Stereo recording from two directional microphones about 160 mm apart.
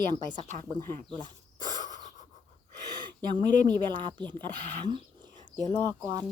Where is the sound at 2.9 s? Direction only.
25° right (ahead or behind).